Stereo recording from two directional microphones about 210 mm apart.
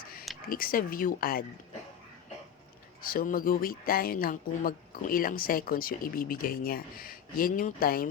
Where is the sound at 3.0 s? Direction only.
45° left (ahead or behind).